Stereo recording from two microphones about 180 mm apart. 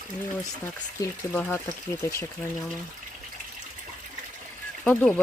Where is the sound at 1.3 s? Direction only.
10° left (ahead or behind).